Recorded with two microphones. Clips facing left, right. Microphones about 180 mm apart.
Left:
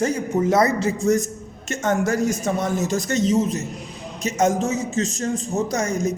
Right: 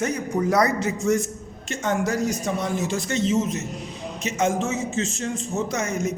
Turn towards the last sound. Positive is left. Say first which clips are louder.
# left 3 dB
turn(degrees=35)  # may be behind; listen again after turning